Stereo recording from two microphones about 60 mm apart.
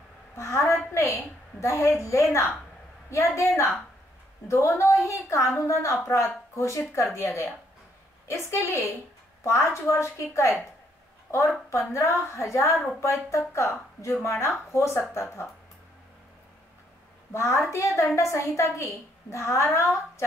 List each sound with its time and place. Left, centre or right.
0.4 s a woman's voice: left
11.9 s a woman's voice: left
17.3 s a woman's voice: left